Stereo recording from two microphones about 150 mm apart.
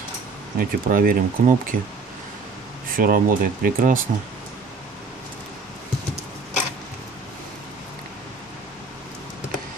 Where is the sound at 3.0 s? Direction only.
70° right (ahead or behind).